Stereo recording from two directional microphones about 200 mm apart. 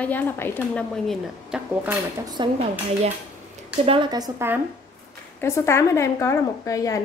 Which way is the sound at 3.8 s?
25° right (ahead or behind).